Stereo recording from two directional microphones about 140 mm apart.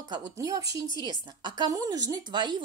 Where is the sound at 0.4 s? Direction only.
25° right (ahead or behind).